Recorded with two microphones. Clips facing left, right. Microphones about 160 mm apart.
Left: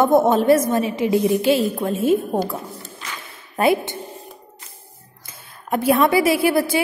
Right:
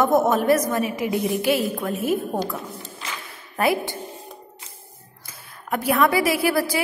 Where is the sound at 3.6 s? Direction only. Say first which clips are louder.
Left 4 dB; 25° left (ahead or behind).